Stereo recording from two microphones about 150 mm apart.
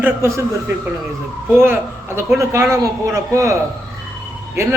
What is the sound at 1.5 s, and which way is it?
A man's voice, 15° right (ahead or behind).